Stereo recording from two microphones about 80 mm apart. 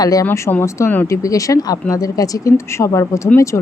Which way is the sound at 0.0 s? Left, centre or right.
Left.